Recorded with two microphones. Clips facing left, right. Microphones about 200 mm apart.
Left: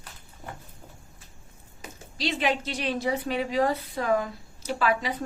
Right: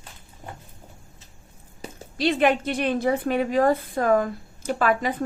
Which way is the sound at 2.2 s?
55° right (ahead or behind).